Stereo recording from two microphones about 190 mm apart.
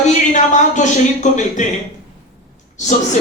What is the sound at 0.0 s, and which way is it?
Speech, 40° left (ahead or behind).